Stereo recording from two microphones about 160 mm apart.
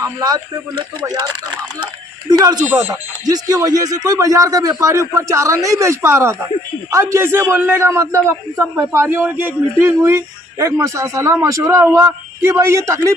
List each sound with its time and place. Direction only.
0.0 s speech: 25° right (ahead or behind)
2.6 s a man's voice: 15° right (ahead or behind)